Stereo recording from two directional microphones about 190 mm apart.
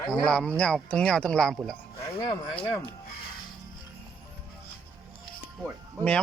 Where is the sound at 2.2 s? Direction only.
25° left (ahead or behind).